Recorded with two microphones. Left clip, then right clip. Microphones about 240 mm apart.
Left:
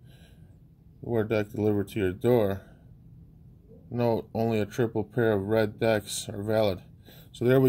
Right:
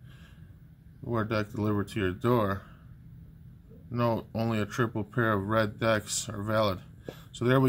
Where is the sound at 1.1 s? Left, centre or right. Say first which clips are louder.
Left 3 dB; centre.